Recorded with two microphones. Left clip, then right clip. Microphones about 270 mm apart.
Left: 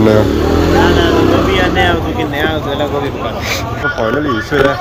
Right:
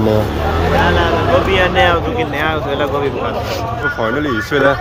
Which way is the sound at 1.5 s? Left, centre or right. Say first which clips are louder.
Even; right.